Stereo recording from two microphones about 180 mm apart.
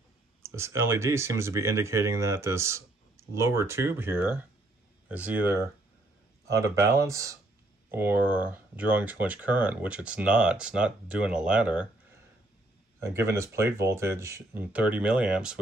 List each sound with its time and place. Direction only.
0.4 s speech: 15° right (ahead or behind)
13.0 s speech: 15° right (ahead or behind)